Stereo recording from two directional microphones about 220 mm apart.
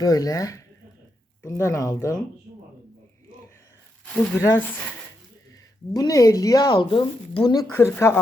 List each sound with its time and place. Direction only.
0.0 s speech: 15° left (ahead or behind)
4.0 s a sound: 5° left (ahead or behind)
4.4 s speech: 10° left (ahead or behind)
5.9 s speech: 15° left (ahead or behind)